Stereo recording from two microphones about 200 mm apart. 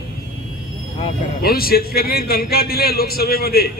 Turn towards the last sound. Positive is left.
turn(degrees=50)  # may be behind; listen again after turning